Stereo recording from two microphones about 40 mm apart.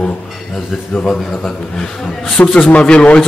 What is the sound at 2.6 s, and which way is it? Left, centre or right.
Speech, left.